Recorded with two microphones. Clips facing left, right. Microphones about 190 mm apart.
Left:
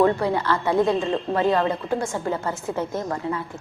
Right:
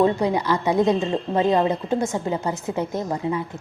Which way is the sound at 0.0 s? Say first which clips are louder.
Even; 15° right (ahead or behind).